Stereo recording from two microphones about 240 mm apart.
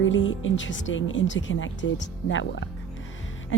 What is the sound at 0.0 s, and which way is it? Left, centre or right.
Speech, left.